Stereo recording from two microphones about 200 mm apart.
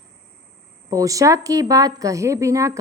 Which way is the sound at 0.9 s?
15° right (ahead or behind).